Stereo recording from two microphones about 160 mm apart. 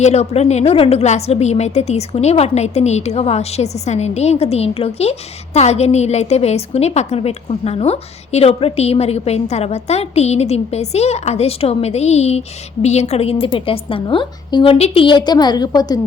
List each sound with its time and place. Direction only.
0.0 s a woman's voice: 45° left (ahead or behind); by 16.0 s 25° left (ahead or behind)